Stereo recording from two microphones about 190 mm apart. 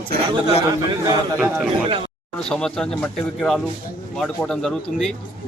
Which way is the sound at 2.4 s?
5° left (ahead or behind).